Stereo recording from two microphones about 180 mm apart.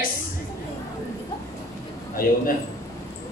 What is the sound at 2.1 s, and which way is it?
Speech, 55° left (ahead or behind).